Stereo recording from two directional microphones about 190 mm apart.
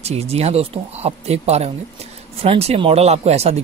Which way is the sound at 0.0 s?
35° right (ahead or behind).